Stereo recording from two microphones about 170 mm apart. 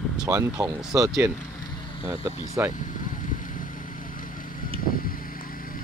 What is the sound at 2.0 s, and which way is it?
Speech, 15° right (ahead or behind).